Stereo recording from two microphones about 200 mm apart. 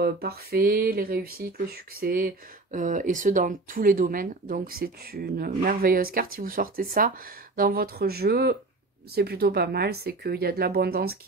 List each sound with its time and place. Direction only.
0.0 s speech: 50° right (ahead or behind)